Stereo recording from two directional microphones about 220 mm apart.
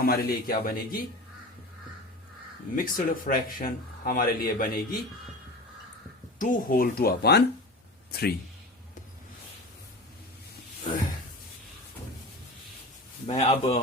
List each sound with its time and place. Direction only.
0.0 s speech: 45° left (ahead or behind)
2.7 s speech: 40° left (ahead or behind)
6.4 s speech: 40° left (ahead or behind)
13.2 s a man's voice: 30° left (ahead or behind)